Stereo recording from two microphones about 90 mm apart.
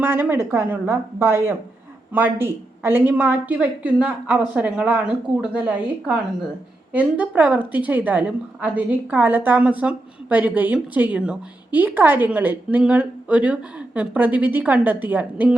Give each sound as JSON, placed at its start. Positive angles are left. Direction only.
{"t": 0.0, "sound": "a woman's voice", "side_deg": -20}